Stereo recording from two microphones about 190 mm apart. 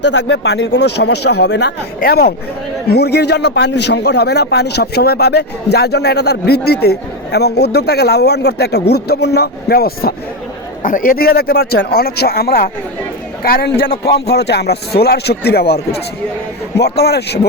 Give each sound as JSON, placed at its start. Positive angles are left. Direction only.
{"t": 0.0, "sound": "a man's voice", "side_deg": 65}